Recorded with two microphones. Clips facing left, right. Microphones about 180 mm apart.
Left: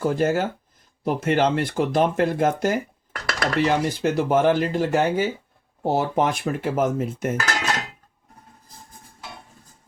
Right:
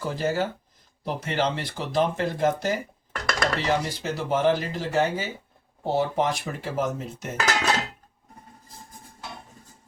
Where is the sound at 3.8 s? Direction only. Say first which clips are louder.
Left 7 dB; 50° left (ahead or behind).